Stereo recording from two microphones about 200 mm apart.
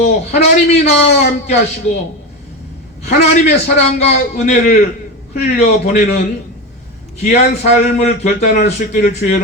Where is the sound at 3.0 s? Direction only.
35° left (ahead or behind).